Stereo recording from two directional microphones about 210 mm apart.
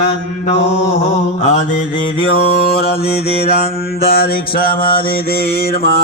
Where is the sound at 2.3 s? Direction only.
50° left (ahead or behind).